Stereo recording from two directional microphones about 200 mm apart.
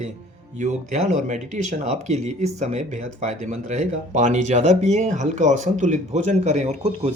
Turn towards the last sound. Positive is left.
turn(degrees=-35)  # may be behind; listen again after turning